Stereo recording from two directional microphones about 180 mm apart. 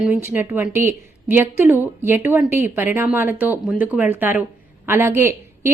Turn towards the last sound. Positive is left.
turn(degrees=-15)  # may be behind; listen again after turning